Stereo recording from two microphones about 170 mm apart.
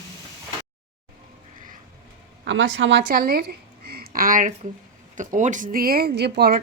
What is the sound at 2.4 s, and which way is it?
A woman's voice, 90° right.